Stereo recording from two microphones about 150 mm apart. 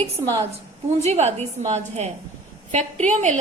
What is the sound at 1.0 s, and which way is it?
A woman's voice, 45° right (ahead or behind).